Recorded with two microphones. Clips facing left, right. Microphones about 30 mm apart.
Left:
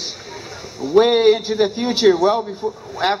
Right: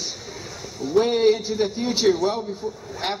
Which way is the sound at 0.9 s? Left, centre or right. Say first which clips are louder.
Left 5 dB; left.